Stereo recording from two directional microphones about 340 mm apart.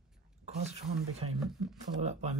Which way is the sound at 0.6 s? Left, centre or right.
Centre.